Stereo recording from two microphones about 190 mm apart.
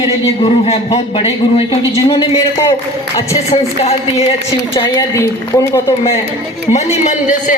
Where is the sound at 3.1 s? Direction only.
35° left (ahead or behind).